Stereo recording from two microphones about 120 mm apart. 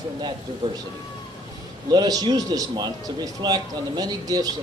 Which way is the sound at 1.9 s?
35° right (ahead or behind).